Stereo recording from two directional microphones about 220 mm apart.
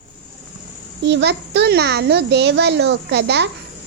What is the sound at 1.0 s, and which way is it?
A child's voice, 50° right (ahead or behind).